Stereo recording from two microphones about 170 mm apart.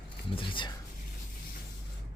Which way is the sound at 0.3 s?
30° left (ahead or behind).